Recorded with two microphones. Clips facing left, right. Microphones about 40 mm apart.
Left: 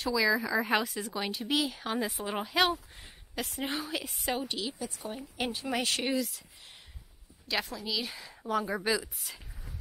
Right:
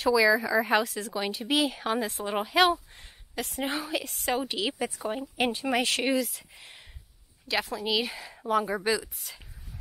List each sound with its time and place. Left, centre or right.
0.0 s speech: centre
2.0 s speech: centre
4.4 s a woman's voice: centre
5.0 s speech: right
5.4 s speech: centre